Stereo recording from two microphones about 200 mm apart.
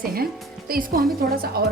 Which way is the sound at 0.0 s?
45° right (ahead or behind).